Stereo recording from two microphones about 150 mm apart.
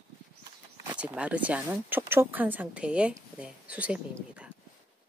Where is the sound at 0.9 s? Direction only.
10° right (ahead or behind).